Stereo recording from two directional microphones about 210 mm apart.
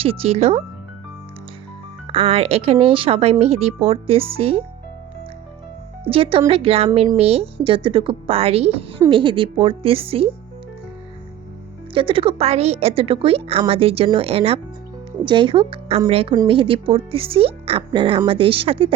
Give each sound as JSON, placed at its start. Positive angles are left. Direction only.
{"t": 0.0, "sound": "speech", "side_deg": -25}
{"t": 2.1, "sound": "speech", "side_deg": -25}
{"t": 6.1, "sound": "speech", "side_deg": -25}
{"t": 11.9, "sound": "speech", "side_deg": -25}